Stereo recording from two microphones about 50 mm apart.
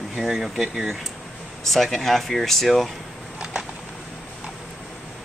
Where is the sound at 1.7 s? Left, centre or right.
Centre.